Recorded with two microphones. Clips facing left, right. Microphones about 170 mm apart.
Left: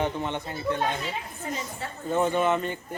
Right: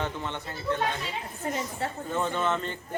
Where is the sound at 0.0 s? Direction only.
15° left (ahead or behind).